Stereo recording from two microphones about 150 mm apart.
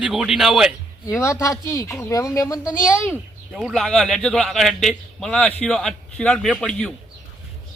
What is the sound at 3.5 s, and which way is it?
Speech, centre (ahead or behind).